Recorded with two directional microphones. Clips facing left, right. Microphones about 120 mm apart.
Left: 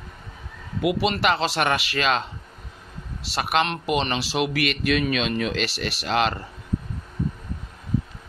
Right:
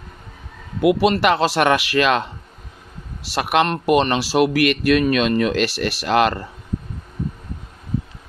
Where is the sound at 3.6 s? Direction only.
50° right (ahead or behind).